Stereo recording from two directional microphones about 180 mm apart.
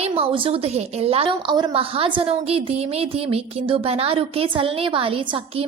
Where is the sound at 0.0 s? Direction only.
30° right (ahead or behind).